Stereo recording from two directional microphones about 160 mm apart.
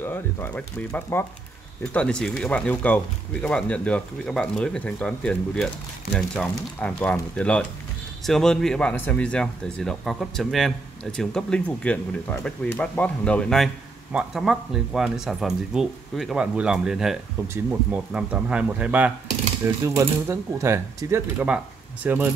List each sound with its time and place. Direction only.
0.0 s speech: 15° left (ahead or behind); by 22.3 s 10° right (ahead or behind)